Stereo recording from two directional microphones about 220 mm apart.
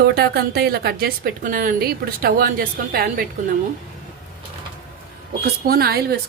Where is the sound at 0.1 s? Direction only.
45° right (ahead or behind).